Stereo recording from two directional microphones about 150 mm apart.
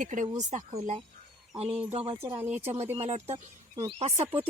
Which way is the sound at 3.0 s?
45° right (ahead or behind).